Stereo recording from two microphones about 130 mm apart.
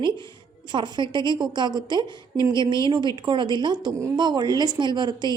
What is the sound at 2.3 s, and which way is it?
Speech, 20° right (ahead or behind).